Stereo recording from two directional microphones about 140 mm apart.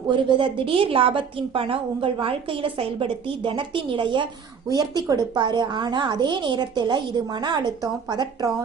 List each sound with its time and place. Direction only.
0.1 s a woman's voice: 35° right (ahead or behind)